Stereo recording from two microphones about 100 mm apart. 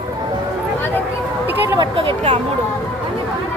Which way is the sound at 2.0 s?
65° right (ahead or behind).